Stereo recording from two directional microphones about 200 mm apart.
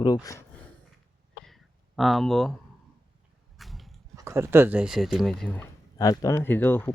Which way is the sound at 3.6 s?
Centre (ahead or behind).